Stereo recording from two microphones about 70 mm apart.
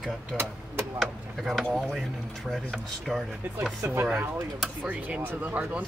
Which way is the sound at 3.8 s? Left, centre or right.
Right.